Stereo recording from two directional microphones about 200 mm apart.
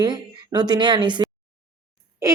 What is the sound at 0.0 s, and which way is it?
A woman's voice, 20° right (ahead or behind).